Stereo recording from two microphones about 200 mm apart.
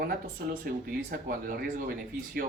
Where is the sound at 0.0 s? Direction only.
50° right (ahead or behind).